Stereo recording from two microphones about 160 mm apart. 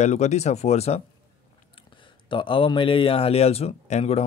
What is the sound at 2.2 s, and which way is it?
Speech, 30° left (ahead or behind).